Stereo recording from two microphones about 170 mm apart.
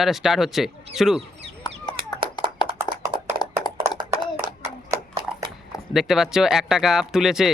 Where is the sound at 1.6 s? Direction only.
25° left (ahead or behind).